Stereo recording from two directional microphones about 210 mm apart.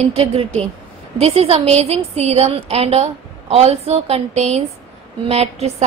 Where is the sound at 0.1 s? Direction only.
30° right (ahead or behind).